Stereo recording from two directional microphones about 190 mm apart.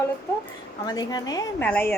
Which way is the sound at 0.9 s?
20° left (ahead or behind).